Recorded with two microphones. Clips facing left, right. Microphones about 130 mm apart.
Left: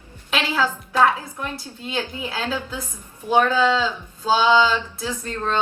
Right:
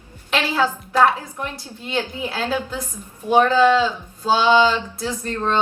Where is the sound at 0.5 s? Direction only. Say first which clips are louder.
Right 2 dB; 20° right (ahead or behind).